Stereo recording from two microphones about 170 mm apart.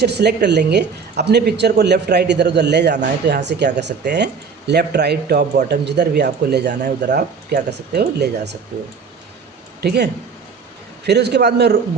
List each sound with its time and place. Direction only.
0.0 s a woman's voice: 75° right (ahead or behind)
9.8 s speech: 70° right (ahead or behind)